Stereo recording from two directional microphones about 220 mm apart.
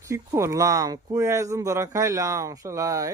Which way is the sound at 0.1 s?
15° right (ahead or behind).